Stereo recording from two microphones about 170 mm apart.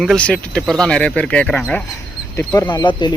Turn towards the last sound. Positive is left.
turn(degrees=25)  # may be behind; listen again after turning